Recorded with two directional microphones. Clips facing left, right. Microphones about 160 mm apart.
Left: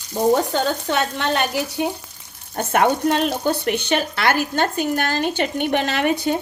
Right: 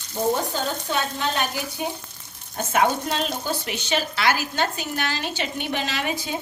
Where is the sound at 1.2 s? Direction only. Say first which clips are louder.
Left 5 dB; 70° left (ahead or behind).